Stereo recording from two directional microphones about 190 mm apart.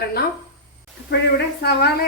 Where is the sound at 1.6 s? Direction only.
55° left (ahead or behind).